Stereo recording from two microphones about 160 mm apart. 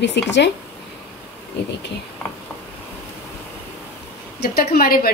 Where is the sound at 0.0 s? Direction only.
90° left.